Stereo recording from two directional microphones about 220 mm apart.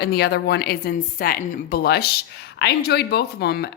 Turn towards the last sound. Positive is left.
turn(degrees=45)  # may be behind; listen again after turning